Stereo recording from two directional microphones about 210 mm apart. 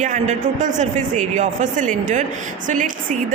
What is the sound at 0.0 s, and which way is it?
A woman's voice, 35° right (ahead or behind).